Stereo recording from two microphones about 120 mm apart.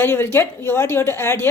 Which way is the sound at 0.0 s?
20° left (ahead or behind).